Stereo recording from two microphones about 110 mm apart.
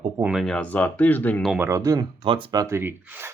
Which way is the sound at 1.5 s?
25° right (ahead or behind).